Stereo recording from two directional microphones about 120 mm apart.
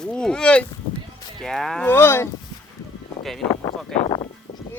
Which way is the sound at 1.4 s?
5° left (ahead or behind).